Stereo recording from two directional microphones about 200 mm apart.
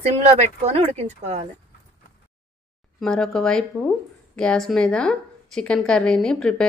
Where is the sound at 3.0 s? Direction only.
5° left (ahead or behind).